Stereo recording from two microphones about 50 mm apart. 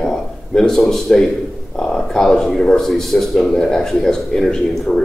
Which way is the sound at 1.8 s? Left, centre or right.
Centre.